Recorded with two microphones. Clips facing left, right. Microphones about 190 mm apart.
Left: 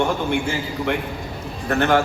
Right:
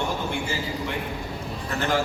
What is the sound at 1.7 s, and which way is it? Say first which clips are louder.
Speech: left 7 dB; 60° left (ahead or behind).